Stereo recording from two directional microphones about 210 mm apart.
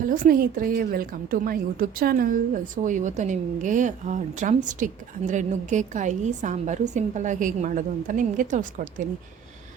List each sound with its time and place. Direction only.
0.0 s a woman's voice: 45° right (ahead or behind)